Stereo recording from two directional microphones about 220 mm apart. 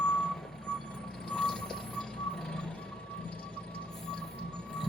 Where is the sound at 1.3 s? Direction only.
5° left (ahead or behind).